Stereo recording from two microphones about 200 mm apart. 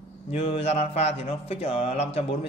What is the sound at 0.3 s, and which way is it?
A man's voice, 30° left (ahead or behind).